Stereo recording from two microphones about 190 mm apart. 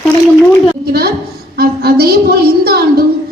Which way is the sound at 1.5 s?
55° right (ahead or behind).